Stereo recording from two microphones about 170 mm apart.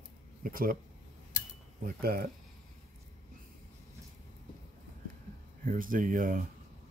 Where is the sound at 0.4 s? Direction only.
55° right (ahead or behind).